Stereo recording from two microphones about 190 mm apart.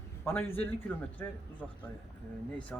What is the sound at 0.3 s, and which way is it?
Speech, 10° left (ahead or behind).